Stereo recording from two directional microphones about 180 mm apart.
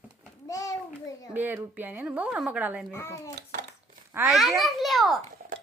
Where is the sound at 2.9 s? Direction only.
15° left (ahead or behind).